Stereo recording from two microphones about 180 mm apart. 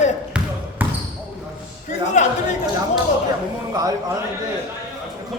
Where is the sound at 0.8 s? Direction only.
10° right (ahead or behind).